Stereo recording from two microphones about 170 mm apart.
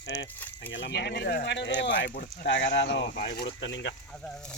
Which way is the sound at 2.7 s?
90° left.